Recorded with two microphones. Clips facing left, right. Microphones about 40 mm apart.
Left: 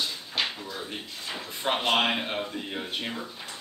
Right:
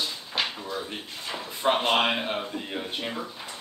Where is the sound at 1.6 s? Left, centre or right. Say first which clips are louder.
Right 2 dB; centre.